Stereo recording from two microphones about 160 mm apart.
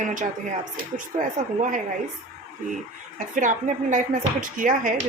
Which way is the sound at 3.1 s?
55° right (ahead or behind).